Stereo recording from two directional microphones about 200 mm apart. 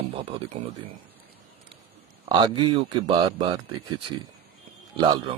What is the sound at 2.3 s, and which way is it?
A man's voice, 25° right (ahead or behind).